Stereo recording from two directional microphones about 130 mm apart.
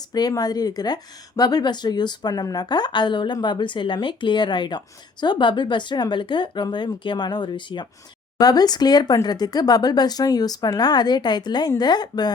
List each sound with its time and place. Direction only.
0.1 s speech: 30° left (ahead or behind)